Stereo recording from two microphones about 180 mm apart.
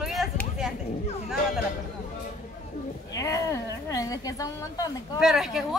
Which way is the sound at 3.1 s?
15° left (ahead or behind).